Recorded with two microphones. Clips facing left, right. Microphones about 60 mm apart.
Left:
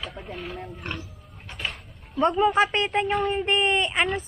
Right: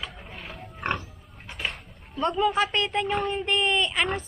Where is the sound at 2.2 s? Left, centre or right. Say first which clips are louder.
Left 3 dB; left.